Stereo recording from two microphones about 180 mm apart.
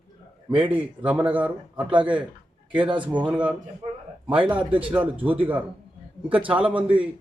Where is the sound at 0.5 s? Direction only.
10° right (ahead or behind).